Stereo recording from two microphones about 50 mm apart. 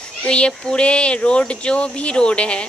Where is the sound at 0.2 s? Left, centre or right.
Left.